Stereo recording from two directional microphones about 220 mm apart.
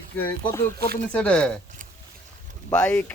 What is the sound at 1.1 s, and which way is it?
Speech, 5° left (ahead or behind).